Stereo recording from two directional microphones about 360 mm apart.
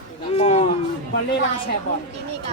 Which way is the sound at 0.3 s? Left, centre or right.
Centre.